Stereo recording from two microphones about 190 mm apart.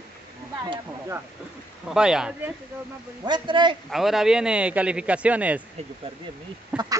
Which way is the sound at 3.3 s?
25° right (ahead or behind).